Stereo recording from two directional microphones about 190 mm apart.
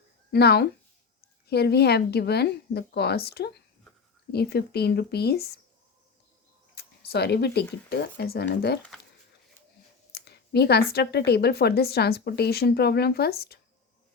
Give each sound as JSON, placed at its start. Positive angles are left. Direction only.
{"t": 0.3, "sound": "speech", "side_deg": 60}
{"t": 6.7, "sound": "speech", "side_deg": 55}
{"t": 10.1, "sound": "a sound", "side_deg": 55}
{"t": 10.9, "sound": "speech", "side_deg": 55}